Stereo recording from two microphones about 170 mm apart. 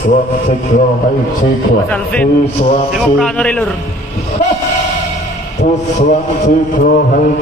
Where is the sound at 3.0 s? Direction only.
5° left (ahead or behind).